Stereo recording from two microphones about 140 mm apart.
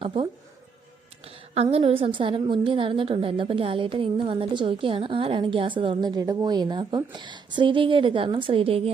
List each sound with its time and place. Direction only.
0.0 s speech: 40° right (ahead or behind)
1.2 s a sound: 45° right (ahead or behind)
1.7 s a woman's voice: 45° right (ahead or behind)